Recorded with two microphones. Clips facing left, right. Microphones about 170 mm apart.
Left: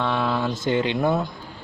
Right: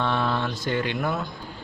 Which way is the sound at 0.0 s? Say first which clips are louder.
Left 1 dB; centre (ahead or behind).